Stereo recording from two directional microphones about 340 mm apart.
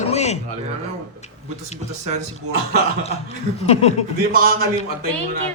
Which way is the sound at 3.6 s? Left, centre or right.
Centre.